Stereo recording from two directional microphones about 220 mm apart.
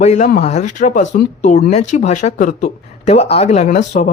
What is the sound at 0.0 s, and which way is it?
Speech, 30° left (ahead or behind).